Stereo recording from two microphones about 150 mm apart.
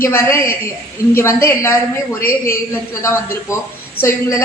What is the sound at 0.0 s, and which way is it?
A woman's voice, 15° left (ahead or behind).